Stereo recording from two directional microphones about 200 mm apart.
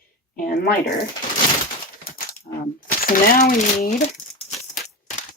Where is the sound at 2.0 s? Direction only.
45° left (ahead or behind).